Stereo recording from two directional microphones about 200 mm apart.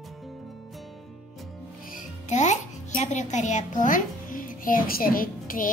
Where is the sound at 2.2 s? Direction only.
35° left (ahead or behind).